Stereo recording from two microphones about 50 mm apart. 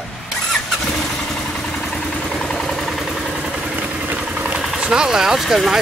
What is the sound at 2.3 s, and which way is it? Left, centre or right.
Vehicle, centre.